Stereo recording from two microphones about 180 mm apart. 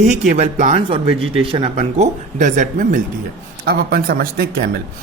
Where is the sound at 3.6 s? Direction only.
60° right (ahead or behind).